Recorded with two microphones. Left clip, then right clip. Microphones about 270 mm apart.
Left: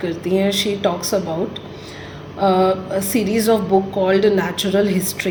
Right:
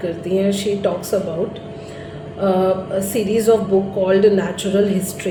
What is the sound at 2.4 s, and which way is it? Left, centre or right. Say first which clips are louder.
A woman's voice: left 1 dB; left.